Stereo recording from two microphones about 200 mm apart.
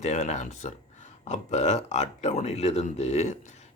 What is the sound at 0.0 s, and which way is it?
Speech, 35° left (ahead or behind).